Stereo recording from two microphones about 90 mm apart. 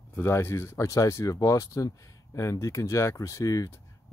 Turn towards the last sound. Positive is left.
turn(degrees=35)  # may be behind; listen again after turning